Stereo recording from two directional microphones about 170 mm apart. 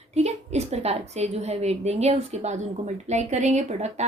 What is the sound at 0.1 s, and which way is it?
A woman's voice, 40° right (ahead or behind).